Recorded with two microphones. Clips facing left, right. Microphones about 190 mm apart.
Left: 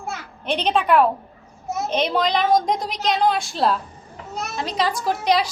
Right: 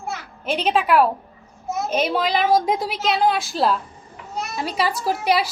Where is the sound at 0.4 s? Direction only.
5° right (ahead or behind).